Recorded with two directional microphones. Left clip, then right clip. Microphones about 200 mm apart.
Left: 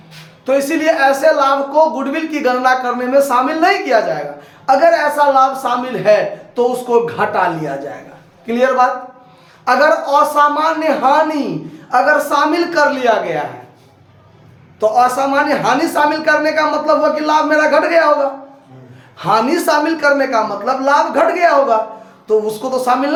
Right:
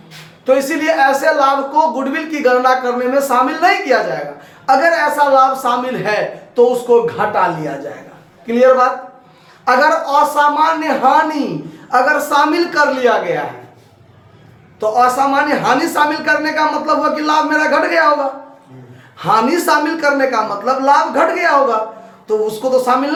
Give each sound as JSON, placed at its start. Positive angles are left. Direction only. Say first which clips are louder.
{"t": 0.4, "sound": "a man's voice", "louder": "even", "side_deg": 15}
{"t": 8.4, "sound": "speech", "louder": "right 2 dB", "side_deg": 15}
{"t": 14.8, "sound": "speech", "louder": "even", "side_deg": 15}
{"t": 19.2, "sound": "speech", "louder": "even", "side_deg": 15}